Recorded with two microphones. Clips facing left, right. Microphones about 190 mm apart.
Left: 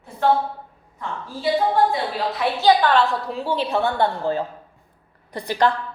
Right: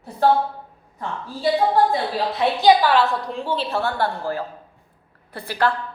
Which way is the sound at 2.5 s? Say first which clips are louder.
Right 1 dB; 10° right (ahead or behind).